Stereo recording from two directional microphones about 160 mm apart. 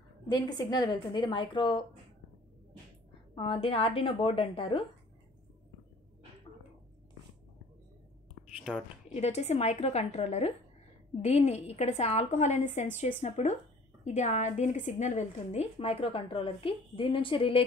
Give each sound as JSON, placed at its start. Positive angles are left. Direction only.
{"t": 0.3, "sound": "a woman's voice", "side_deg": 25}
{"t": 3.3, "sound": "a woman's voice", "side_deg": 35}
{"t": 8.5, "sound": "whispering", "side_deg": -5}
{"t": 9.1, "sound": "a woman's voice", "side_deg": 40}